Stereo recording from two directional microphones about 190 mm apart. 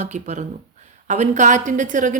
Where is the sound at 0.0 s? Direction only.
40° right (ahead or behind).